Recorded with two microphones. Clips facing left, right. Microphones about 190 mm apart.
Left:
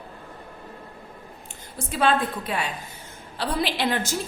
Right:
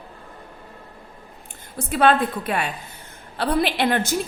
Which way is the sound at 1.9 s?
60° right (ahead or behind).